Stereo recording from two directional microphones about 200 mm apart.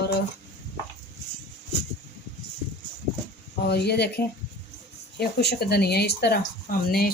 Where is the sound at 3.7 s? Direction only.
55° left (ahead or behind).